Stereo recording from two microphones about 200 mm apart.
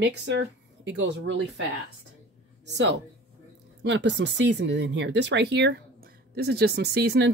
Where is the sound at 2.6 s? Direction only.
60° right (ahead or behind).